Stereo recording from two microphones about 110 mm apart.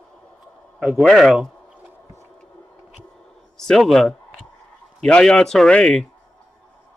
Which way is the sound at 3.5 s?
5° left (ahead or behind).